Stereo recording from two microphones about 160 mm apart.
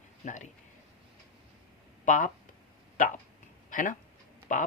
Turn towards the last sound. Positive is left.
turn(degrees=50)  # may be behind; listen again after turning